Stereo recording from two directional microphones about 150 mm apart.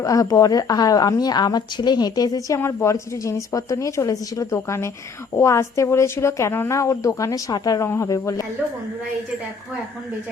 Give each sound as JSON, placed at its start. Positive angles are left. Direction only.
{"t": 0.0, "sound": "a woman's voice", "side_deg": 20}